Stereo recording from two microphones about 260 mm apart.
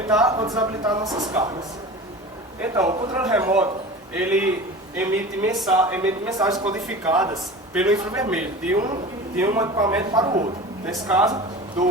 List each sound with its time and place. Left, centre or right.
0.2 s speech: centre
2.8 s speech: centre
3.2 s a man's voice: centre